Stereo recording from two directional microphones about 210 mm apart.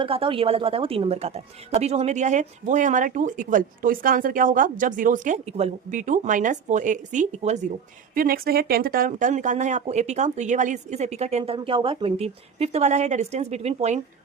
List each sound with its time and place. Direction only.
0.0 s a woman's voice: 25° right (ahead or behind)